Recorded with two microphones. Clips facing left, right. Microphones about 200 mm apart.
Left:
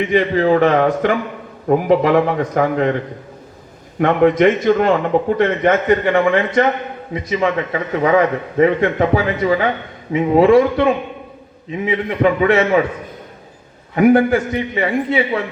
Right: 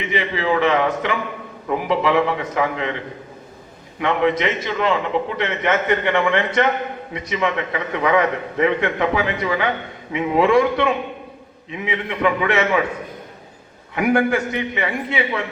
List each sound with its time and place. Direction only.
0.0 s a man's voice: 45° left (ahead or behind)
4.0 s a man's voice: 50° left (ahead or behind)
13.9 s a man's voice: 35° left (ahead or behind)